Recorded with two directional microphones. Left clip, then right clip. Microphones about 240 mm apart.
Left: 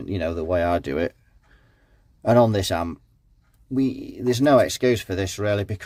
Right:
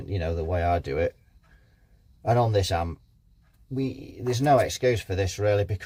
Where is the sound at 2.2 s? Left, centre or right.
Left.